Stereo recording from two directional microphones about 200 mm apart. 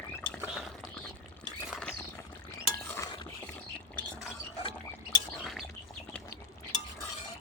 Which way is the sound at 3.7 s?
Centre (ahead or behind).